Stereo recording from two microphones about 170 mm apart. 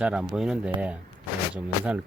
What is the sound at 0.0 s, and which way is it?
Speech, 5° right (ahead or behind).